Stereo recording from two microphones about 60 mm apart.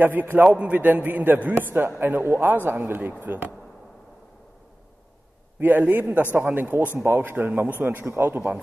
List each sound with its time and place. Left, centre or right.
0.0 s a man's voice: right
5.6 s a man's voice: right